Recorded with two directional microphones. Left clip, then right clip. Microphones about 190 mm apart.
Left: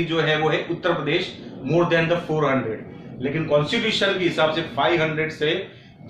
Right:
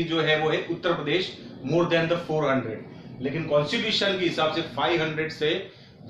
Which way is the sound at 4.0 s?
15° right (ahead or behind).